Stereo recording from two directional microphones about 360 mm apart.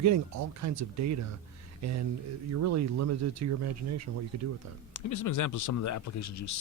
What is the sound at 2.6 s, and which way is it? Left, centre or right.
Speech, right.